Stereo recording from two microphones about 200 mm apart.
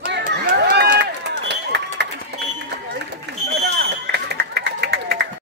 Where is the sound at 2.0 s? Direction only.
55° right (ahead or behind).